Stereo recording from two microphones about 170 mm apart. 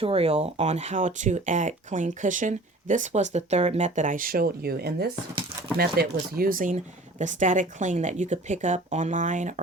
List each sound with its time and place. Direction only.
0.0 s speech: 35° right (ahead or behind)